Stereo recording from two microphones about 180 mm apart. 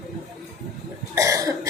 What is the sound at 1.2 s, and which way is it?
Cough, 20° right (ahead or behind).